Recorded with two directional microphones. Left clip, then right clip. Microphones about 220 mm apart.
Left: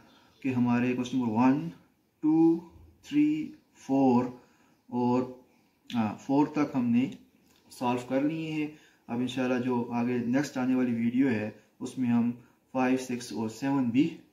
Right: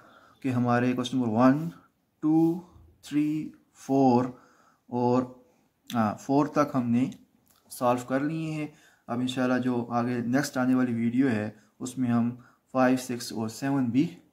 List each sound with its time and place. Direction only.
0.4 s speech: 45° right (ahead or behind)
3.1 s speech: 50° right (ahead or behind)